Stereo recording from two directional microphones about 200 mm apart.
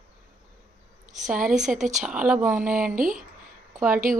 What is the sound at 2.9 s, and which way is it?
Speech, 40° right (ahead or behind).